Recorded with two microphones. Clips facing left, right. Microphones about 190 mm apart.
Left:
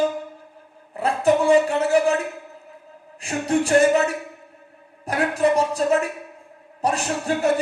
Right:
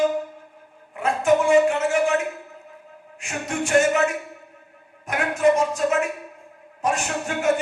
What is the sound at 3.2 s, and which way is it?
Speech, 35° left (ahead or behind).